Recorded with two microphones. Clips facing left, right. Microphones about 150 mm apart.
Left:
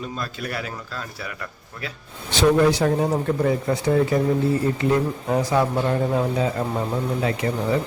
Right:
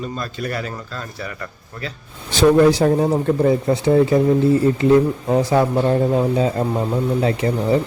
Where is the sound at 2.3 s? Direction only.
40° right (ahead or behind).